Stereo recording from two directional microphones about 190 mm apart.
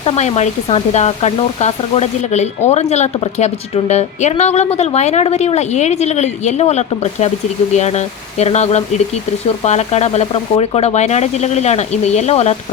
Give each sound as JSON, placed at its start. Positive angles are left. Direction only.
{"t": 0.0, "sound": "speech", "side_deg": 35}